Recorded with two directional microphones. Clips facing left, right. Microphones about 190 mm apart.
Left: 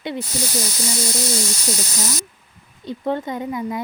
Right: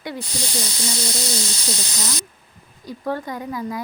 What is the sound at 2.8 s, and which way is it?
Speech, 25° left (ahead or behind).